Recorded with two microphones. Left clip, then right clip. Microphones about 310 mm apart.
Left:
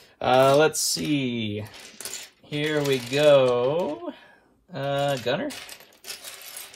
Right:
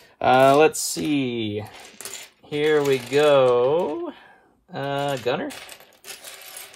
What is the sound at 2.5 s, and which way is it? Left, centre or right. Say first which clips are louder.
Speech: right 5 dB; right.